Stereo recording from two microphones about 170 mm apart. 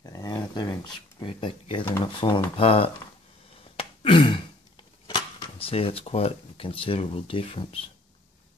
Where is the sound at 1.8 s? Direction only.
20° left (ahead or behind).